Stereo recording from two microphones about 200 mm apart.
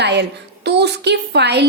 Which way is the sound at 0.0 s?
55° right (ahead or behind).